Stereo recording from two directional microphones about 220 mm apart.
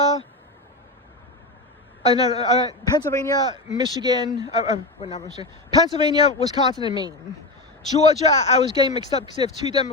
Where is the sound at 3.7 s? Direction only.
20° right (ahead or behind).